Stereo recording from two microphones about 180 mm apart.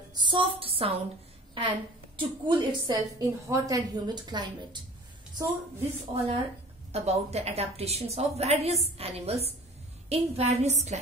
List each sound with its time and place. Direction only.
0.1 s a woman's voice: 25° right (ahead or behind)
6.1 s a woman's voice: 30° right (ahead or behind)